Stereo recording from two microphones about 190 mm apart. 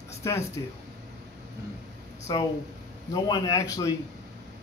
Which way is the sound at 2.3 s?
20° left (ahead or behind).